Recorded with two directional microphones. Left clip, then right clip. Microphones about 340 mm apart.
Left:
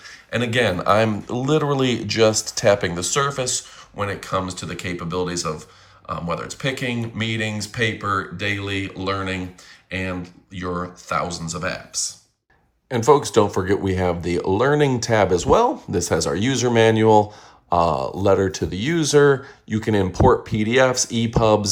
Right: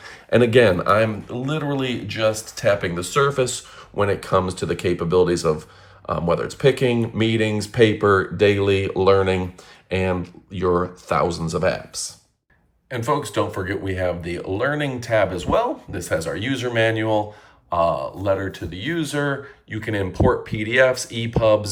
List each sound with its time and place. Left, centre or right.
0.0 s speech: centre
12.9 s speech: centre